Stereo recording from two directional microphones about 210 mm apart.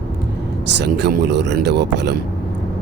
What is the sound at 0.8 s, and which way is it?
Speech, 55° right (ahead or behind).